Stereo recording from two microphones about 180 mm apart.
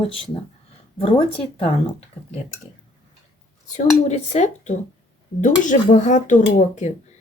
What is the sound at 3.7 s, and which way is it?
Speech, 40° left (ahead or behind).